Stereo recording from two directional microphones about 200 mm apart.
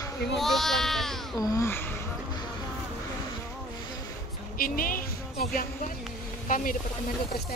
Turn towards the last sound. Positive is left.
turn(degrees=40)  # may be behind; listen again after turning